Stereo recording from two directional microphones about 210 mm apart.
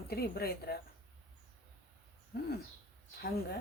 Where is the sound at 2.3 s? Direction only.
50° left (ahead or behind).